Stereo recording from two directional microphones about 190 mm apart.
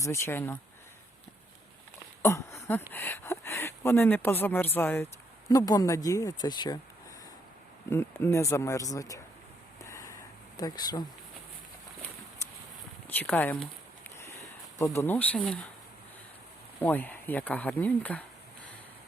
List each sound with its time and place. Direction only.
0.0 s speech: 15° left (ahead or behind)
2.2 s speech: 15° left (ahead or behind)
7.9 s speech: 15° left (ahead or behind)
9.8 s a sound: 15° left (ahead or behind)
10.6 s speech: 20° left (ahead or behind)
13.1 s speech: 10° left (ahead or behind)
14.8 s speech: 15° left (ahead or behind)
16.8 s speech: 10° left (ahead or behind)